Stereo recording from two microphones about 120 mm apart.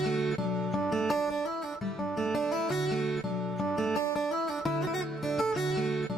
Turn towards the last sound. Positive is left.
turn(degrees=0)  # may be behind; listen again after turning